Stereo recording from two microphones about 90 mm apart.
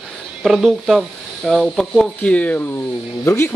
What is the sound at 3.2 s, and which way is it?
Speech, 30° left (ahead or behind).